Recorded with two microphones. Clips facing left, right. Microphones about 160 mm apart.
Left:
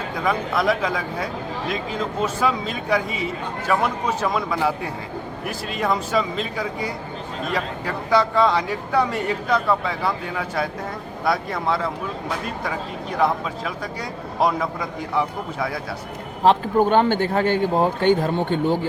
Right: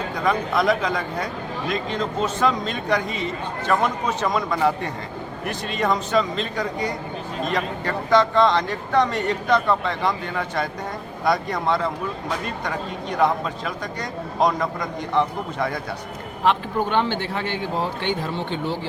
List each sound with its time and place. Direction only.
0.2 s speech: 5° left (ahead or behind)
16.4 s a man's voice: 40° left (ahead or behind)